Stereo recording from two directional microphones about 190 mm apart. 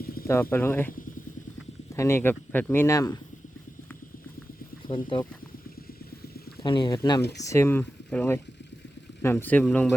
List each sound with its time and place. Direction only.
0.0 s a sound: 50° left (ahead or behind)
0.5 s speech: 10° left (ahead or behind)
5.0 s speech: 25° left (ahead or behind)
6.6 s speech: 25° left (ahead or behind); by 9.9 s 5° left (ahead or behind)